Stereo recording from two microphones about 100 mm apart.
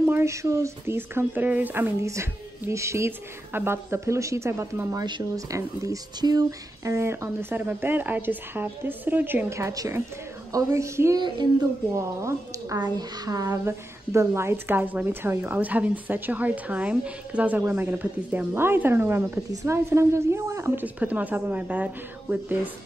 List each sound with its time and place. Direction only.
0.0 s a woman's voice: 25° right (ahead or behind)
2.0 s a woman's voice: 30° right (ahead or behind)
5.0 s speech: 50° right (ahead or behind)
5.5 s a woman's voice: 35° right (ahead or behind)
11.1 s speech: 50° right (ahead or behind)
12.0 s a woman's voice: 30° right (ahead or behind)
12.7 s a woman's voice: 45° right (ahead or behind); by 20.8 s 25° right (ahead or behind)
20.8 s speech: 15° right (ahead or behind)